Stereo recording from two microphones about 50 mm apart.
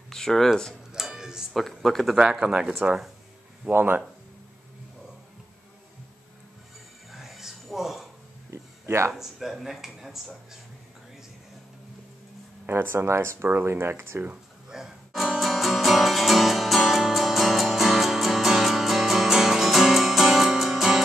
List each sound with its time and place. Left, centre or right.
0.1 s speech: centre
0.9 s music: centre
1.5 s speech: centre
2.1 s speech: centre
3.7 s speech: right
7.1 s a sound: centre
8.5 s a sound: right
9.1 s speech: centre
12.6 s speech: right
13.7 s speech: right
14.7 s music: centre